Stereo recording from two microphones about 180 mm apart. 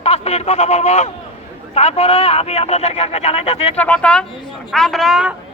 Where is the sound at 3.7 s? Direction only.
5° left (ahead or behind).